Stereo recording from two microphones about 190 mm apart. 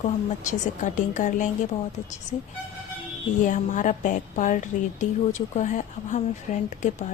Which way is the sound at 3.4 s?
40° left (ahead or behind).